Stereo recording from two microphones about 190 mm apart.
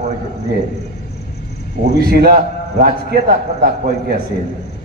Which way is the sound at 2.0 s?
55° right (ahead or behind).